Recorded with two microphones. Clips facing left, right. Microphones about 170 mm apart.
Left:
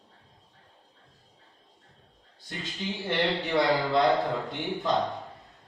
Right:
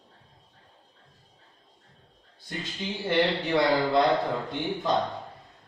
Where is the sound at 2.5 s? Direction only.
Centre (ahead or behind).